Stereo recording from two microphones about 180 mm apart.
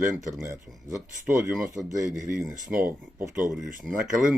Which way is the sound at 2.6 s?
10° right (ahead or behind).